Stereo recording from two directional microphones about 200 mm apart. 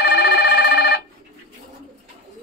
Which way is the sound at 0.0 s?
55° left (ahead or behind).